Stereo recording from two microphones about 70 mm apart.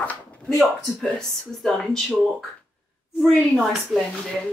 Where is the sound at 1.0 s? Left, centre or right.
Centre.